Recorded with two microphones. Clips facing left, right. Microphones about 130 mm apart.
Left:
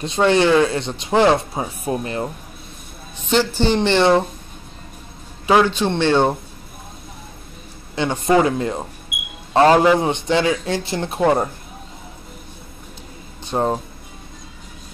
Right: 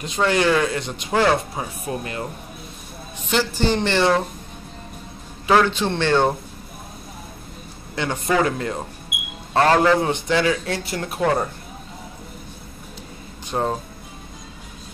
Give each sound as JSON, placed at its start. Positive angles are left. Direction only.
{"t": 0.0, "sound": "speech", "side_deg": 25}
{"t": 3.3, "sound": "speech", "side_deg": 25}
{"t": 5.5, "sound": "speech", "side_deg": 15}
{"t": 7.9, "sound": "speech", "side_deg": 20}
{"t": 13.5, "sound": "speech", "side_deg": 20}